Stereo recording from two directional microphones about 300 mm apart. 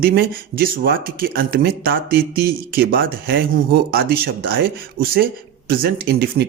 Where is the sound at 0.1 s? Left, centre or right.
Right.